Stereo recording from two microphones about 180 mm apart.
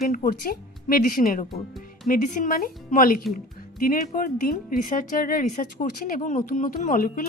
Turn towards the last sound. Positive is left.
turn(degrees=50)  # may be behind; listen again after turning